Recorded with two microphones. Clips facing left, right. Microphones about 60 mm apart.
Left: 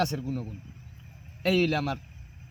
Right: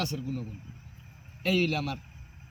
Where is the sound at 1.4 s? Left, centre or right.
Left.